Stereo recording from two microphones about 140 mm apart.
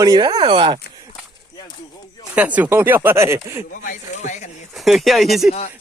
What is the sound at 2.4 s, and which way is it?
Speech, 10° right (ahead or behind).